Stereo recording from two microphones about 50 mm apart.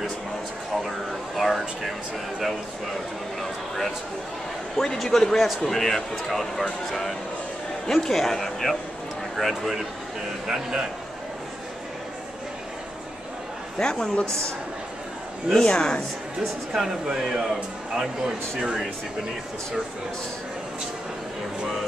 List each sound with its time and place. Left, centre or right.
0.8 s a sound: centre
3.3 s speech: centre
13.7 s speech: centre
14.2 s a woman's voice: right
15.6 s speech: centre
16.7 s speech: centre